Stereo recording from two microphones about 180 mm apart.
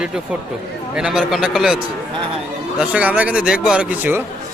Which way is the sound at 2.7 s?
5° right (ahead or behind).